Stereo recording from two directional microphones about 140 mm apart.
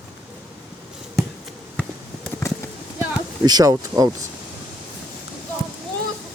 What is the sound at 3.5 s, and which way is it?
Speech, 30° right (ahead or behind).